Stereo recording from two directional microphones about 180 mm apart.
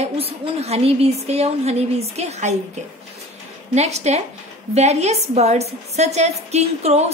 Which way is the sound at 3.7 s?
40° right (ahead or behind).